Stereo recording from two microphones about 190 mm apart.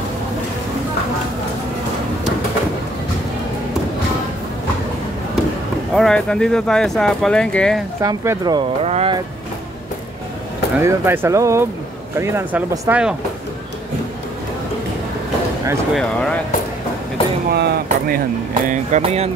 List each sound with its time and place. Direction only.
5.9 s speech: 5° left (ahead or behind)
8.0 s speech: 15° right (ahead or behind)
8.8 s speech: 35° right (ahead or behind)
10.8 s speech: 15° right (ahead or behind)
15.9 s speech: 5° left (ahead or behind)
17.5 s speech: 50° right (ahead or behind)
18.5 s speech: 40° right (ahead or behind)